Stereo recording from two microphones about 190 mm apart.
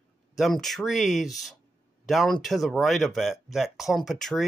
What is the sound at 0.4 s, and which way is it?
Speech, centre (ahead or behind).